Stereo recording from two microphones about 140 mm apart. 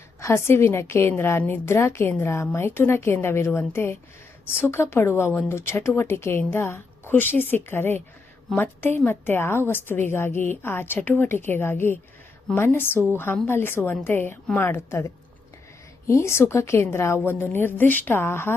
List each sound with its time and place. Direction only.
0.2 s a woman's voice: 20° left (ahead or behind)